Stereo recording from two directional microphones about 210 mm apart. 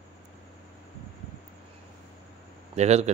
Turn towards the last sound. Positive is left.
turn(degrees=-30)  # may be behind; listen again after turning